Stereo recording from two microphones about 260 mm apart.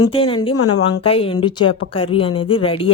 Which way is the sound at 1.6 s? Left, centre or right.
Left.